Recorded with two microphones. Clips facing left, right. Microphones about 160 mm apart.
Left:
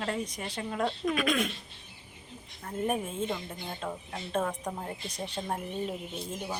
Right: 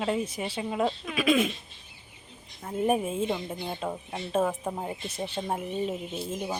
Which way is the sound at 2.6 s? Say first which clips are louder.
Right 5 dB; 10° right (ahead or behind).